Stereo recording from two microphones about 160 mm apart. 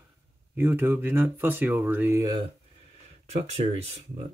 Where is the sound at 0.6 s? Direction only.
15° right (ahead or behind).